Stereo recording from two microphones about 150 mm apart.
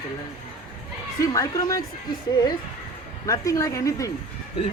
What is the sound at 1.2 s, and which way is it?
Speech, 25° left (ahead or behind).